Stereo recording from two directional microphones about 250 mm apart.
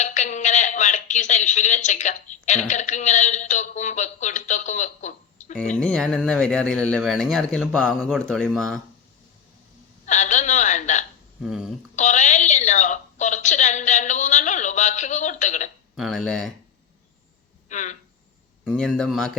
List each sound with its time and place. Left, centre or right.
0.0 s speech: left
5.8 s speech: centre
10.1 s speech: left
11.4 s speech: centre
11.9 s speech: left
16.0 s speech: centre
17.7 s speech: left
18.6 s speech: centre